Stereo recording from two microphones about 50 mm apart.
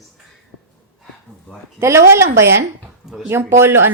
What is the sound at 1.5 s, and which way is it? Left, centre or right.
Speech, left.